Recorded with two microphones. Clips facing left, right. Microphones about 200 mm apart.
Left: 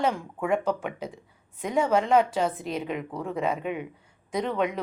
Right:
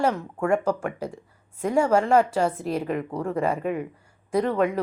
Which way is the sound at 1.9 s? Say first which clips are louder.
Right 1 dB; 5° right (ahead or behind).